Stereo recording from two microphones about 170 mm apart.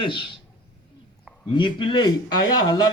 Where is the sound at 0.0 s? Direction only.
30° left (ahead or behind).